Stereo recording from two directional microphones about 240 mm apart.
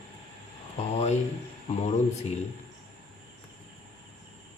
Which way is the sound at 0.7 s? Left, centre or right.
Left.